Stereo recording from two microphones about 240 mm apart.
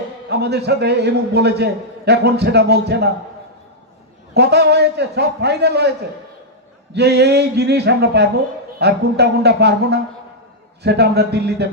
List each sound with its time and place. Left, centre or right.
0.3 s a man's voice: right
4.4 s a man's voice: right
6.9 s a man's voice: right